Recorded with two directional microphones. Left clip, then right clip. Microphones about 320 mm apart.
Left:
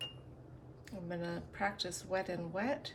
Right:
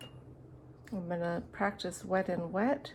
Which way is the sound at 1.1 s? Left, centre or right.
Centre.